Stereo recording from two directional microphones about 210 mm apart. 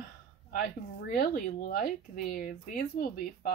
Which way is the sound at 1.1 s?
45° left (ahead or behind).